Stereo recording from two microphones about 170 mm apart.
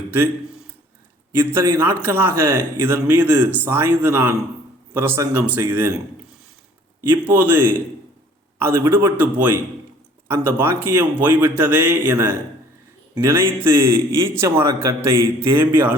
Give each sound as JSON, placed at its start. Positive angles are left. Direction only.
{"t": 1.3, "sound": "a man's voice", "side_deg": -15}
{"t": 7.1, "sound": "a man's voice", "side_deg": -10}